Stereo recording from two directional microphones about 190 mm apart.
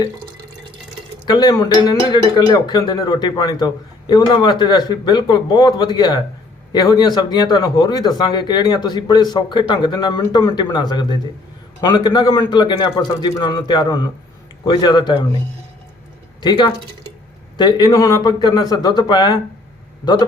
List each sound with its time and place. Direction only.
1.2 s speech: 20° left (ahead or behind)
16.4 s speech: 25° left (ahead or behind)